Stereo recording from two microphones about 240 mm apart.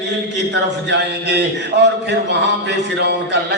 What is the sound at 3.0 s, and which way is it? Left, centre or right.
Speech, right.